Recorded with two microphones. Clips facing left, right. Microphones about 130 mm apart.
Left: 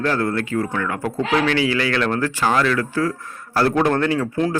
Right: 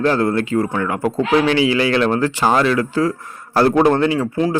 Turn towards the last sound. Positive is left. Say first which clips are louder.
# right 2 dB
turn(degrees=-5)  # may be behind; listen again after turning